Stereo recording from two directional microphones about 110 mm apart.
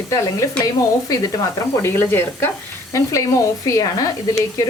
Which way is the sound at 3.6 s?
30° left (ahead or behind).